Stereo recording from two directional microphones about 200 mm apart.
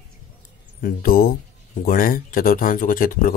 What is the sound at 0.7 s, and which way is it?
Speech, 45° left (ahead or behind).